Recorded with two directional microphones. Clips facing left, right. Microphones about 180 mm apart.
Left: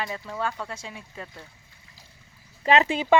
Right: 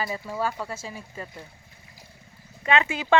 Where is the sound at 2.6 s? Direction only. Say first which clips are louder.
Left 3 dB; 35° left (ahead or behind).